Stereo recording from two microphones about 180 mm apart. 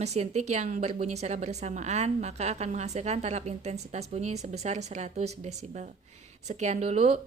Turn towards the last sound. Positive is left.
turn(degrees=-35)  # may be behind; listen again after turning